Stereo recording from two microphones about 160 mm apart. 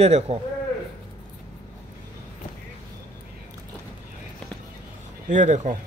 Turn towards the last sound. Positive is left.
turn(degrees=-50)  # may be behind; listen again after turning